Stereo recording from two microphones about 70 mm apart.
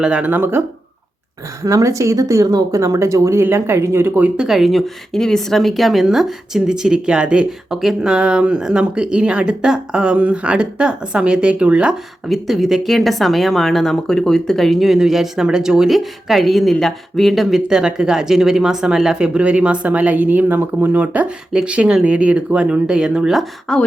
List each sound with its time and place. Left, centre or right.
0.0 s speech: centre
0.3 s speech: right
1.6 s speech: right
2.7 s speech: right
4.4 s speech: centre
12.3 s speech: centre
23.7 s speech: centre